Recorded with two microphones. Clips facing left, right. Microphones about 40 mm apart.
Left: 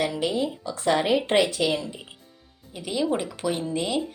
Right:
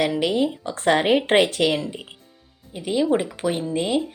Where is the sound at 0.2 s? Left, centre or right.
Right.